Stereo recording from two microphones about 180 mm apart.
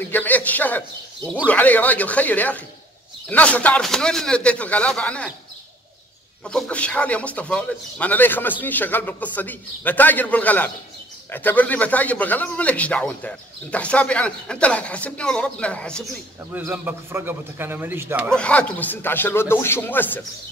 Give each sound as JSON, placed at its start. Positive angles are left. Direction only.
{"t": 0.1, "sound": "a man's voice", "side_deg": 10}
{"t": 6.4, "sound": "a man's voice", "side_deg": 5}
{"t": 16.5, "sound": "a man's voice", "side_deg": -10}
{"t": 18.3, "sound": "a man's voice", "side_deg": 5}